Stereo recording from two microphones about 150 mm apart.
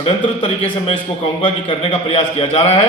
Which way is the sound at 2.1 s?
45° left (ahead or behind).